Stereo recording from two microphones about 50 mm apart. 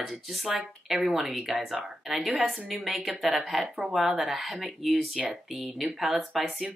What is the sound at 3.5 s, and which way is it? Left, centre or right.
Speech, centre.